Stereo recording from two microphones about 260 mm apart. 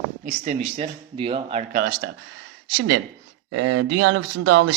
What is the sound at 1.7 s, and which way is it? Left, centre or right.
Speech, right.